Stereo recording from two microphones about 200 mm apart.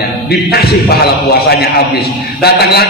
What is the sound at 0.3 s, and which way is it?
A man's voice, 50° left (ahead or behind).